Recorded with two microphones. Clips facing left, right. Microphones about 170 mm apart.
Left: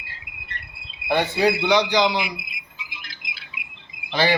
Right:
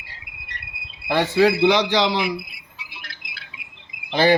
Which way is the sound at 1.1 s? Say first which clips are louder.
Right 3 dB; 90° right.